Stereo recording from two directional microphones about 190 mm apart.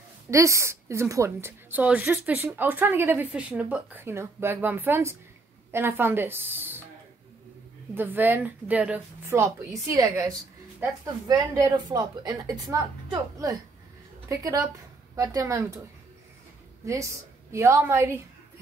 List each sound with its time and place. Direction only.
0.3 s a woman's voice: 15° right (ahead or behind)
7.9 s a woman's voice: 10° right (ahead or behind)
16.8 s a woman's voice: 15° right (ahead or behind)